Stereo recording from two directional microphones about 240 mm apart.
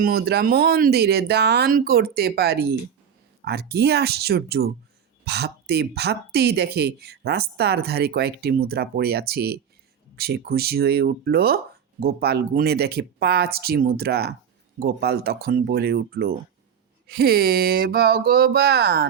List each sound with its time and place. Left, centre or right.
0.0 s speech: right